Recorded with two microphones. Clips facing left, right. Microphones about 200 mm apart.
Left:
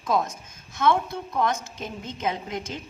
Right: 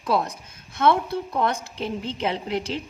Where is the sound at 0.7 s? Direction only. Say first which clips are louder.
Right 2 dB; 60° right (ahead or behind).